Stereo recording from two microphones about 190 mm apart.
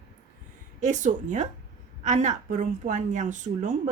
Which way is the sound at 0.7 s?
40° right (ahead or behind).